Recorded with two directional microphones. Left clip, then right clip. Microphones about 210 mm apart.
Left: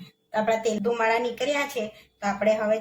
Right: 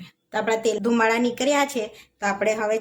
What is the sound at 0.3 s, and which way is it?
A woman's voice, 45° right (ahead or behind).